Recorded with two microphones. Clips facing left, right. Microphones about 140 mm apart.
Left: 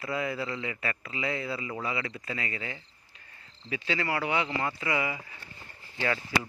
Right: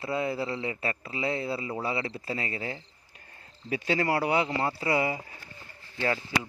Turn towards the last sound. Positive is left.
turn(degrees=-30)  # may be behind; listen again after turning